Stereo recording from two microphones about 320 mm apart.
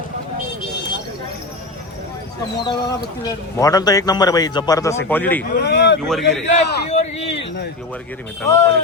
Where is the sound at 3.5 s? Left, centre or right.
Centre.